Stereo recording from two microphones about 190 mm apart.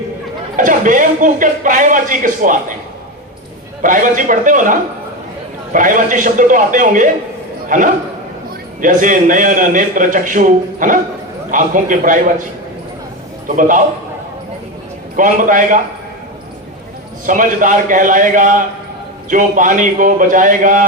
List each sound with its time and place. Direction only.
0.5 s a man's voice: 45° right (ahead or behind)
3.8 s a man's voice: 45° right (ahead or behind)
13.6 s a man's voice: 45° right (ahead or behind)
15.1 s a man's voice: 45° right (ahead or behind)
17.2 s a man's voice: 45° right (ahead or behind)